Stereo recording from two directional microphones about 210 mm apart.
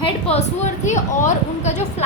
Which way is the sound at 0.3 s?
35° left (ahead or behind).